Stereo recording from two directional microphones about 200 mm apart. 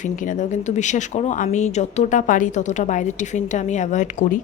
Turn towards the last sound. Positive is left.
turn(degrees=40)  # may be behind; listen again after turning